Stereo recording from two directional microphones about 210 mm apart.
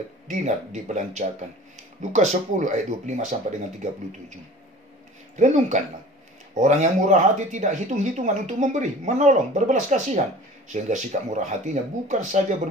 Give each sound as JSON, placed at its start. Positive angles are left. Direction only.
{"t": 0.3, "sound": "speech", "side_deg": -35}
{"t": 5.3, "sound": "speech", "side_deg": -35}